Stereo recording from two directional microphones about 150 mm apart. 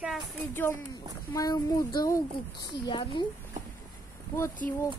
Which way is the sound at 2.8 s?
30° left (ahead or behind).